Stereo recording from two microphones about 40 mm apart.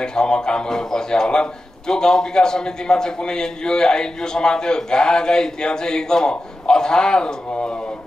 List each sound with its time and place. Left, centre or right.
0.0 s a man's voice: centre